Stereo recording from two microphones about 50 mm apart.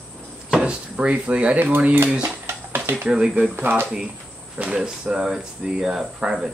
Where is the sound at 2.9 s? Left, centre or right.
Right.